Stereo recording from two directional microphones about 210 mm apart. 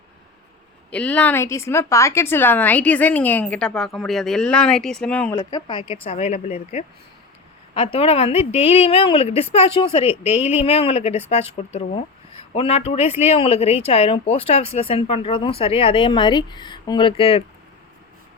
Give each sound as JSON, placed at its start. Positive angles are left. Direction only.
{"t": 0.9, "sound": "speech", "side_deg": 5}
{"t": 7.9, "sound": "speech", "side_deg": 30}